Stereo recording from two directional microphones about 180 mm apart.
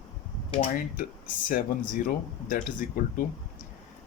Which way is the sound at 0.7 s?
50° left (ahead or behind).